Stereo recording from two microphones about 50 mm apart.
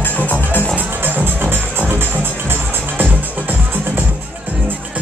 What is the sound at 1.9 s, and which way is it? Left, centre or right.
Music, right.